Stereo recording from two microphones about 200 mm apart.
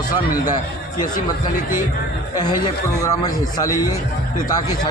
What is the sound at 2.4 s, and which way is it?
A man's voice, 20° left (ahead or behind).